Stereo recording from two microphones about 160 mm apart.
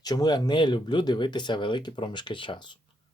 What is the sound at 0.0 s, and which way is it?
Speech, 25° left (ahead or behind).